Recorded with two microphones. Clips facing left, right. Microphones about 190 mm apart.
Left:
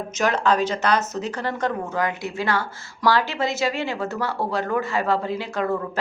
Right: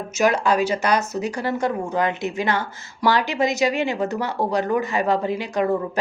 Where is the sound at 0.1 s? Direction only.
10° right (ahead or behind).